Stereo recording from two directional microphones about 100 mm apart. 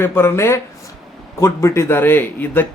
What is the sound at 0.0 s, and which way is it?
A man's voice, 25° left (ahead or behind).